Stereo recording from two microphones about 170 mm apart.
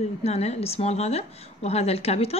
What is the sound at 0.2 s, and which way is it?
A woman's voice, 40° left (ahead or behind).